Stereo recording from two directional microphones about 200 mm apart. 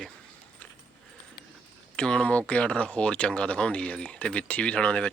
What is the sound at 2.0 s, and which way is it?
Speech, 5° left (ahead or behind).